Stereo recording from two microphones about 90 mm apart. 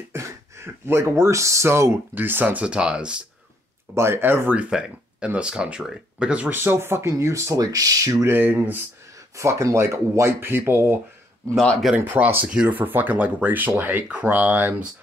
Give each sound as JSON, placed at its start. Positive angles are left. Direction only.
{"t": 0.1, "sound": "a sound", "side_deg": -30}
{"t": 0.8, "sound": "speech", "side_deg": -30}
{"t": 3.9, "sound": "speech", "side_deg": -30}
{"t": 4.6, "sound": "speech", "side_deg": -10}
{"t": 6.5, "sound": "speech", "side_deg": -25}
{"t": 9.4, "sound": "speech", "side_deg": -35}
{"t": 11.5, "sound": "speech", "side_deg": 10}
{"t": 12.0, "sound": "speech", "side_deg": -25}